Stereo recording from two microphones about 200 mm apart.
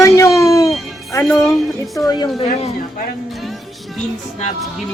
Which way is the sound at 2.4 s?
30° left (ahead or behind).